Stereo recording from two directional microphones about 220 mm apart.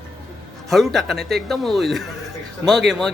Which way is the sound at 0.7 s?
Centre (ahead or behind).